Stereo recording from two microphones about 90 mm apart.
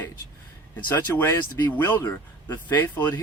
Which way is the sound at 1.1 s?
25° left (ahead or behind).